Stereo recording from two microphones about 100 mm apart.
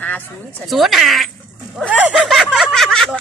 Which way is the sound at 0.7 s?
Centre (ahead or behind).